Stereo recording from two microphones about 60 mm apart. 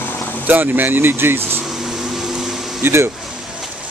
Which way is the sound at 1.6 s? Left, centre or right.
Centre.